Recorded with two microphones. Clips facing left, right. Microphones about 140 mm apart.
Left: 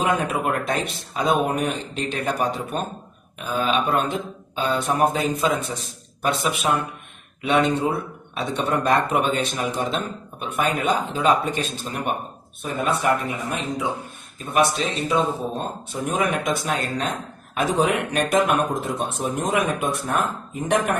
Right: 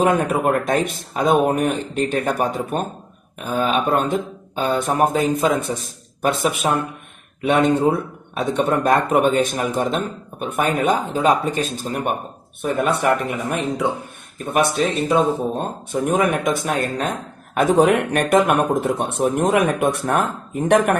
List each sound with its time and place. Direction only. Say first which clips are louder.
0.0 s speech: right 5 dB; 45° right (ahead or behind)
12.8 s speech: right 2 dB; 60° right (ahead or behind)